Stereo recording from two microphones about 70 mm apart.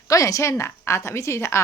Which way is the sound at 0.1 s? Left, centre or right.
Left.